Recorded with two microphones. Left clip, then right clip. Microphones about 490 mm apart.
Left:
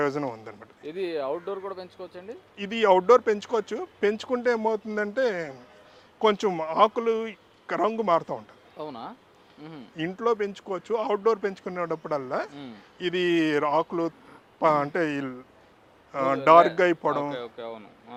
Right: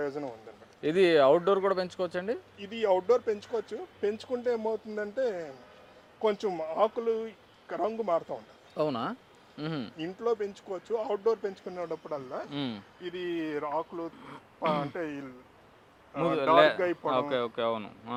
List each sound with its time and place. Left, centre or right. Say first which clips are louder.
0.0 s speech: left 7 dB; left
0.8 s speech: right 8 dB; right
2.6 s speech: left 8 dB; left
8.7 s speech: right 6 dB; right
10.0 s speech: left 6 dB; left
17.2 s speech: right 2 dB; right